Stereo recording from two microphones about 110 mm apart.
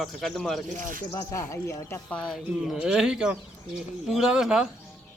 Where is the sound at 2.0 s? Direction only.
10° left (ahead or behind).